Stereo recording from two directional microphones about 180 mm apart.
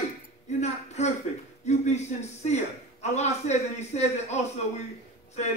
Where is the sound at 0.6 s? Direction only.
40° left (ahead or behind).